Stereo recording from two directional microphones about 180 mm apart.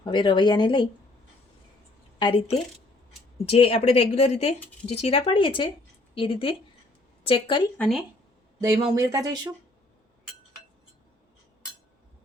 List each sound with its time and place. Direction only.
0.0 s speech: 25° left (ahead or behind)
2.1 s a woman's voice: 30° left (ahead or behind)
7.8 s speech: centre (ahead or behind)
8.6 s speech: 20° right (ahead or behind)